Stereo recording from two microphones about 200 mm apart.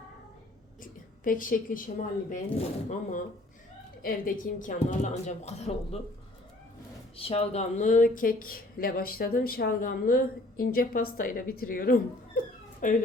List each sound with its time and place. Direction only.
0.8 s a woman's voice: 40° left (ahead or behind)
4.0 s a woman's voice: 45° left (ahead or behind)
7.2 s a woman's voice: 30° left (ahead or behind)